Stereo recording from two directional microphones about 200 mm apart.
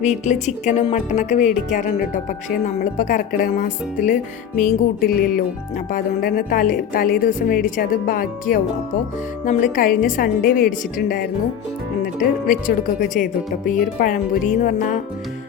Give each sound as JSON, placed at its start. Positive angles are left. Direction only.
{"t": 0.0, "sound": "a woman's voice", "side_deg": 35}